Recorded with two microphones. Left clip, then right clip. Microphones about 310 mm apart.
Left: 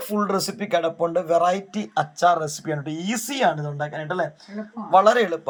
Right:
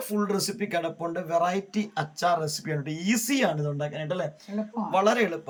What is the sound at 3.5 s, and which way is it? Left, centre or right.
Speech, left.